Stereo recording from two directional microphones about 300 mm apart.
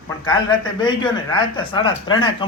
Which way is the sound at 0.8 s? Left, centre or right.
Centre.